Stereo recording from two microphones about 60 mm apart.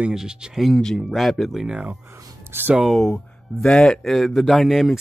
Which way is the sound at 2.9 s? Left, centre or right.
Centre.